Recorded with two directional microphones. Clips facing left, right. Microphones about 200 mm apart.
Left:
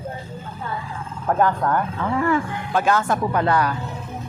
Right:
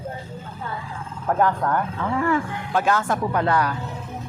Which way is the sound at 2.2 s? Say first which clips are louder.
Left 1 dB; 20° left (ahead or behind).